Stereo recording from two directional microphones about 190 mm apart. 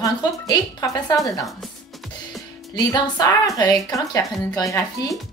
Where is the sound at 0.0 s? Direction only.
20° left (ahead or behind).